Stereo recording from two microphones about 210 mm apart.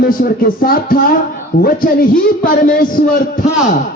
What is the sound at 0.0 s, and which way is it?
A man's voice, 45° left (ahead or behind).